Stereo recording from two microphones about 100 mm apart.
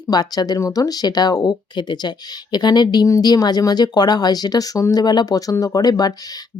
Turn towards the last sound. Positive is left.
turn(degrees=40)  # may be behind; listen again after turning